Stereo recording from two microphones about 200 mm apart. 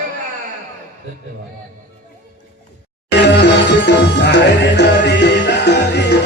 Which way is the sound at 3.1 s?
60° left (ahead or behind).